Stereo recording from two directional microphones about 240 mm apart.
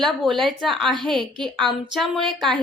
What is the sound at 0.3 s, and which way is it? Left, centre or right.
A woman's voice, centre.